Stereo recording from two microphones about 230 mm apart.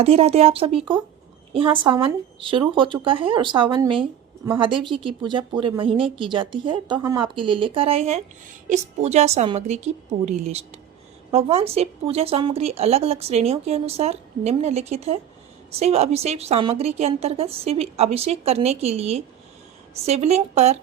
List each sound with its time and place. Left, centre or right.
0.0 s speech: right